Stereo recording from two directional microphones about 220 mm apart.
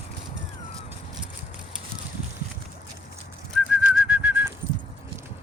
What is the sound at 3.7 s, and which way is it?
Bird, 5° right (ahead or behind).